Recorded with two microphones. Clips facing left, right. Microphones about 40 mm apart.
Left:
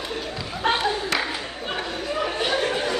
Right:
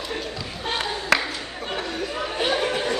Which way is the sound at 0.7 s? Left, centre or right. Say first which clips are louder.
Left 3 dB; centre.